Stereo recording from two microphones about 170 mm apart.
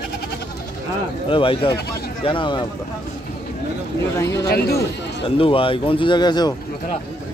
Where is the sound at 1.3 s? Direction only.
30° left (ahead or behind).